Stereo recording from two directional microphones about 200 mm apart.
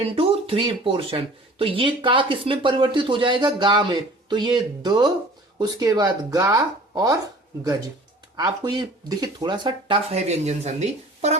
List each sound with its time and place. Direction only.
0.0 s speech: 30° right (ahead or behind)
8.4 s speech: 20° right (ahead or behind)